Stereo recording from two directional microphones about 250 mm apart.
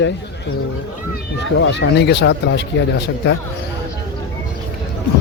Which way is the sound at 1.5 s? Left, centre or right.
Left.